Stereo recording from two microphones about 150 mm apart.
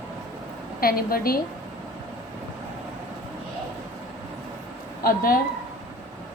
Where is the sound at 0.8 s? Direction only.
80° left.